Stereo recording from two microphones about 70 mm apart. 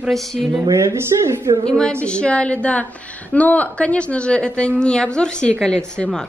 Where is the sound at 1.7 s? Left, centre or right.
Centre.